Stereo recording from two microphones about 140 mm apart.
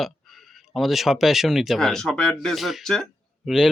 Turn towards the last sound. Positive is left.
turn(degrees=0)  # may be behind; listen again after turning